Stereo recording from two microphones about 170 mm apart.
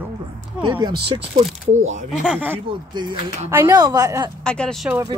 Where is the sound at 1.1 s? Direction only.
30° right (ahead or behind).